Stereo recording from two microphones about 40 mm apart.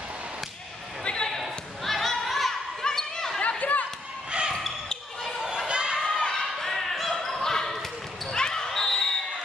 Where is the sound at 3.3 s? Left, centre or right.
Left.